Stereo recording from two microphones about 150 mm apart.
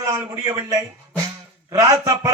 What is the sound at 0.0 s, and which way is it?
A man's voice, 20° right (ahead or behind).